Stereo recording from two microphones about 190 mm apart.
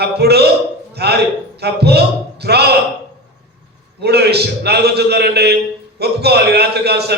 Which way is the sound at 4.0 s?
60° right (ahead or behind).